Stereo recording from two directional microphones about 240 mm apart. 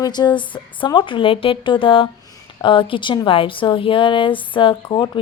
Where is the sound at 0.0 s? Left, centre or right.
Centre.